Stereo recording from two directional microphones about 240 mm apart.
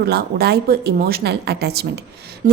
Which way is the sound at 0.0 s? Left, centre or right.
Right.